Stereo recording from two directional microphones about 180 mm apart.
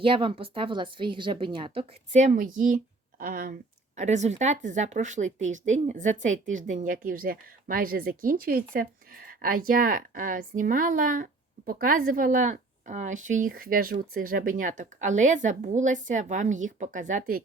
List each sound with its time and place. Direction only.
0.0 s speech: 30° right (ahead or behind)
2.1 s speech: 45° right (ahead or behind)